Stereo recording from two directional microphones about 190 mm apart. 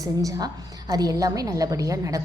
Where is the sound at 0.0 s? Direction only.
20° right (ahead or behind).